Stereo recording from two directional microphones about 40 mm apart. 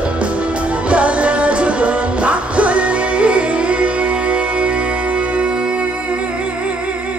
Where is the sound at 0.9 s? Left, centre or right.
Right.